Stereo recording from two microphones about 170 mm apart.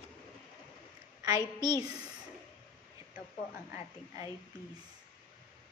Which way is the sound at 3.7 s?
15° right (ahead or behind).